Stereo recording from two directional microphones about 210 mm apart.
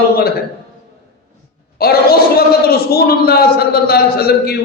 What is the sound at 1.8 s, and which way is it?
A man's voice, 50° left (ahead or behind).